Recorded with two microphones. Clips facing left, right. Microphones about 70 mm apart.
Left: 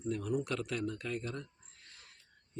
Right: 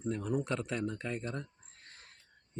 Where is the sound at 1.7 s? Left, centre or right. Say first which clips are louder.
Right 2 dB; right.